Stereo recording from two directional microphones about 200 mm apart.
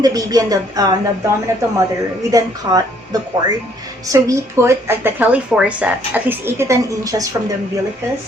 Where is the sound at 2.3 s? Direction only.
20° right (ahead or behind).